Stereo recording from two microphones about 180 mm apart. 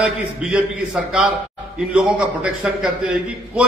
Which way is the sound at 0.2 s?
5° right (ahead or behind).